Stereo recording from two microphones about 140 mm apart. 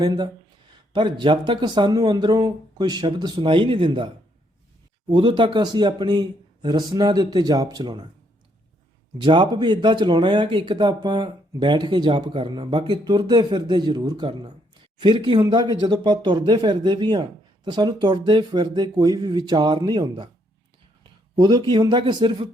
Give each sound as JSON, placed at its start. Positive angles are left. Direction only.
{"t": 0.0, "sound": "speech", "side_deg": -30}
{"t": 5.1, "sound": "speech", "side_deg": -35}
{"t": 9.1, "sound": "speech", "side_deg": -35}
{"t": 21.3, "sound": "speech", "side_deg": -30}